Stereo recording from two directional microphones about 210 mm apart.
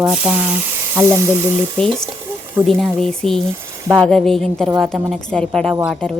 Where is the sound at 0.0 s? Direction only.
5° right (ahead or behind).